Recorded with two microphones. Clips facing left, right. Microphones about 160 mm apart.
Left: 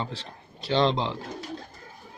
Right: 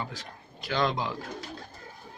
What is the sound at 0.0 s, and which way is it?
A man's voice, 30° left (ahead or behind).